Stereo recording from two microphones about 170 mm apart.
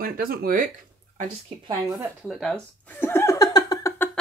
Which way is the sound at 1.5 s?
30° right (ahead or behind).